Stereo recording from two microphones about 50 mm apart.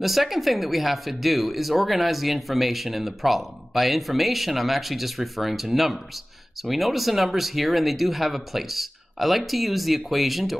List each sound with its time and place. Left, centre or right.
0.0 s speech: centre